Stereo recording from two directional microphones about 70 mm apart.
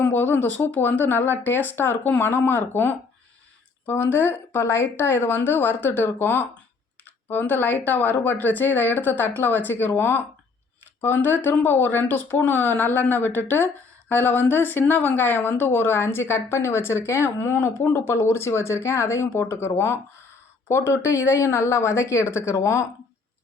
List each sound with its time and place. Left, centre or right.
0.0 s a woman's voice: left